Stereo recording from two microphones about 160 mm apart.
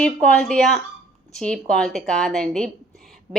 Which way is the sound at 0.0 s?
5° left (ahead or behind).